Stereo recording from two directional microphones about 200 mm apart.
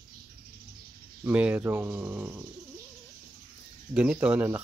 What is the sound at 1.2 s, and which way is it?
Speech, 5° right (ahead or behind).